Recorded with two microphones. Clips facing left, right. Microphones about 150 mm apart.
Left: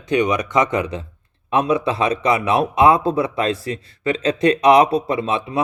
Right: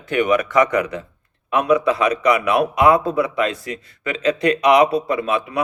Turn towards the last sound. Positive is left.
turn(degrees=25)  # may be behind; listen again after turning